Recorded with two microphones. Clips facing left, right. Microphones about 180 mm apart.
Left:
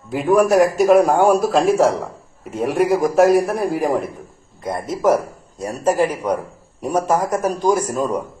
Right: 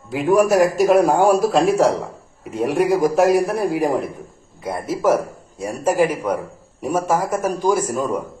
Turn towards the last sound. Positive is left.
turn(degrees=-10)  # may be behind; listen again after turning